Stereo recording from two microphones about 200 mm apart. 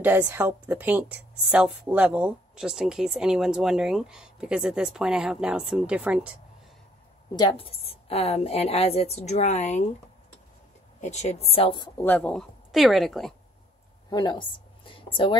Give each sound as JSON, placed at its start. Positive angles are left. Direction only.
{"t": 0.0, "sound": "a woman's voice", "side_deg": -10}
{"t": 7.3, "sound": "a woman's voice", "side_deg": 30}
{"t": 11.0, "sound": "a woman's voice", "side_deg": 35}
{"t": 12.0, "sound": "a woman's voice", "side_deg": 10}
{"t": 14.1, "sound": "a woman's voice", "side_deg": 20}